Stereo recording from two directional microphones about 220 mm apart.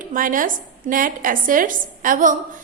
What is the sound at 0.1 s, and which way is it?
A woman's voice, 40° right (ahead or behind).